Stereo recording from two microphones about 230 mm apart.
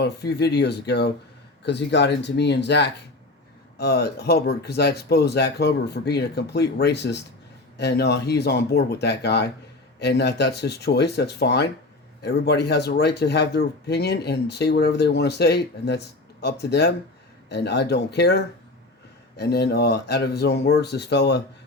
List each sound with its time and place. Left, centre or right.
0.0 s speech: left